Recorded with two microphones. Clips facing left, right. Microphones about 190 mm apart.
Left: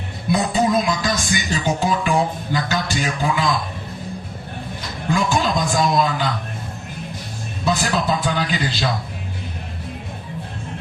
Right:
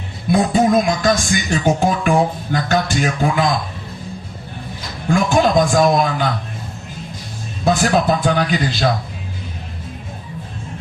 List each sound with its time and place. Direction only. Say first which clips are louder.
0.3 s speech: right 4 dB; 50° right (ahead or behind)
5.1 s speech: right 6 dB; 50° right (ahead or behind)
7.6 s speech: right 5 dB; 50° right (ahead or behind)